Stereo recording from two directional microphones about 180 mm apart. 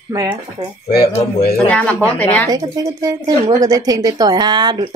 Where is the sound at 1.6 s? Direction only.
5° left (ahead or behind).